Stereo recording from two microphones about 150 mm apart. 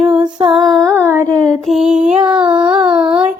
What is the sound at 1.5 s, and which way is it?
Mantra, centre (ahead or behind).